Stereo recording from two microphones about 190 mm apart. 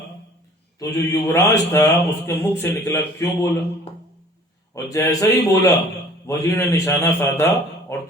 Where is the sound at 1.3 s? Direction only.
15° left (ahead or behind).